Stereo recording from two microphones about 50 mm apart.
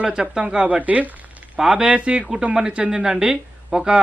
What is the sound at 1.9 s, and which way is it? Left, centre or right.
Speech, right.